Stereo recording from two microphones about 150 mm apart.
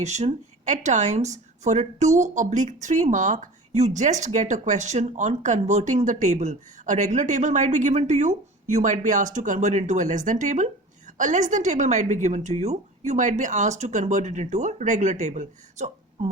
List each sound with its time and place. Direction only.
0.0 s speech: 50° right (ahead or behind)